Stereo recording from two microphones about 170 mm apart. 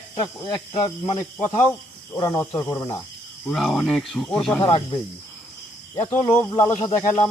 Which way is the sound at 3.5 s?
Centre (ahead or behind).